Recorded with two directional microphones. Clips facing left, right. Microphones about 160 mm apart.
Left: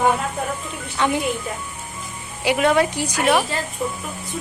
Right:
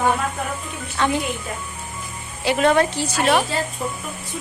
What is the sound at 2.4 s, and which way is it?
Speech, 10° left (ahead or behind).